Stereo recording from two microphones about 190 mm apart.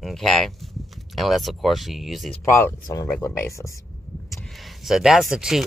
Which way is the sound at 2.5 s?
15° left (ahead or behind).